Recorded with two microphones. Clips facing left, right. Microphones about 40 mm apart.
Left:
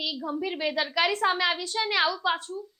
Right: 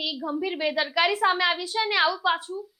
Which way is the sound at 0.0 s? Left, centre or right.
Centre.